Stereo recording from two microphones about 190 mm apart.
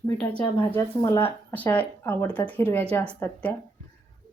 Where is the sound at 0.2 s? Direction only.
10° left (ahead or behind).